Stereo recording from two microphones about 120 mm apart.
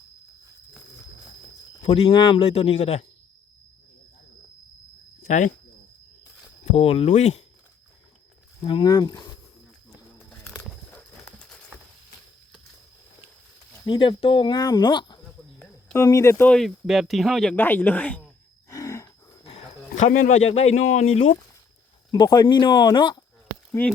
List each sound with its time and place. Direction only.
1.8 s speech: 60° left (ahead or behind)
2.1 s speech: 45° left (ahead or behind); by 3.1 s 60° left (ahead or behind)
5.3 s speech: 85° left
6.7 s speech: 55° left (ahead or behind)
8.6 s speech: 40° left (ahead or behind)
10.6 s clip-clop: 10° left (ahead or behind)
13.8 s speech: 40° left (ahead or behind)
16.0 s speech: 25° left (ahead or behind)
16.5 s speech: centre (ahead or behind)
17.5 s speech: 15° left (ahead or behind)
18.7 s a sound: 25° left (ahead or behind)
20.0 s speech: 90° left
20.5 s speech: 65° left (ahead or behind)
22.1 s speech: 35° left (ahead or behind)